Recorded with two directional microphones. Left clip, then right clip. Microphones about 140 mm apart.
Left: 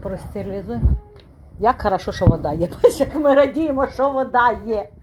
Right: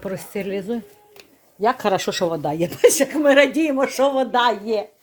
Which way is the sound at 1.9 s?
35° right (ahead or behind).